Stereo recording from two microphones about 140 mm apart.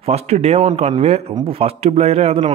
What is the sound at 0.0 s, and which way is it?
A man's voice, 50° right (ahead or behind).